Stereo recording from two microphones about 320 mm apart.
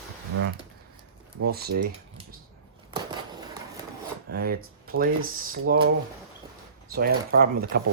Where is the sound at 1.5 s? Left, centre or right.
Right.